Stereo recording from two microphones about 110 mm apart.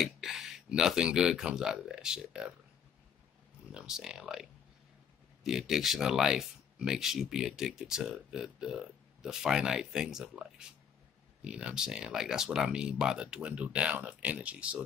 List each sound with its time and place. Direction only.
0.0 s speech: 5° right (ahead or behind)
3.7 s speech: 5° right (ahead or behind)